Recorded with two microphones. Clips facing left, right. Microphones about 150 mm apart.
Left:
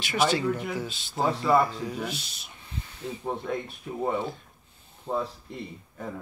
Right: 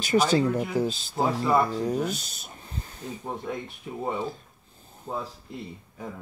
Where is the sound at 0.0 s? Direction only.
40° right (ahead or behind).